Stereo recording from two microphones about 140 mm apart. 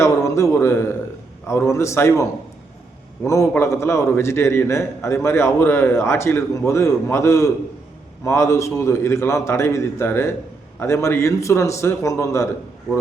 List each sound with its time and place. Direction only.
0.0 s a man's voice: 20° left (ahead or behind)
3.2 s a man's voice: 20° left (ahead or behind)